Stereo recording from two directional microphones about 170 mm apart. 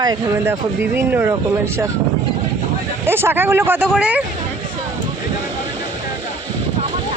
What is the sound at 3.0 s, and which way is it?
Speech, 15° right (ahead or behind).